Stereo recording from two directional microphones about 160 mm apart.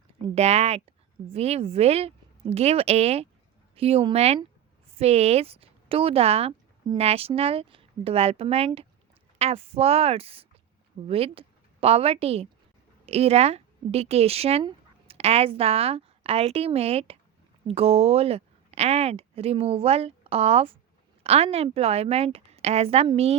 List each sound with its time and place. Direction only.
0.3 s a woman's voice: 40° right (ahead or behind)